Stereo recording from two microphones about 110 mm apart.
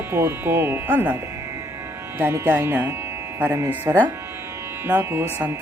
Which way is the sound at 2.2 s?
20° right (ahead or behind).